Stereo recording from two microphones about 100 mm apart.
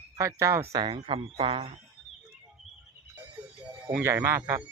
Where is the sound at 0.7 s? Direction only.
50° right (ahead or behind).